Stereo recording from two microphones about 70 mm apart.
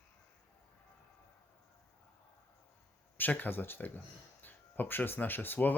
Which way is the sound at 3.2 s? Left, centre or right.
Left.